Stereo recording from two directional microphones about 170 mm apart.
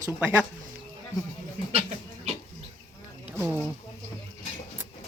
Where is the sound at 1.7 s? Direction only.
40° right (ahead or behind).